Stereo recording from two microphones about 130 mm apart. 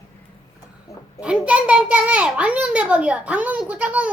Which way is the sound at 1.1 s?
5° right (ahead or behind).